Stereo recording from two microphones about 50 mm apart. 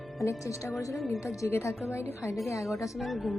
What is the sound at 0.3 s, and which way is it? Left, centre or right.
Speech, left.